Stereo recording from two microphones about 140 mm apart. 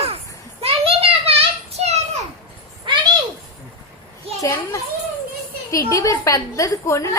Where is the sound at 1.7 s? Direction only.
50° right (ahead or behind).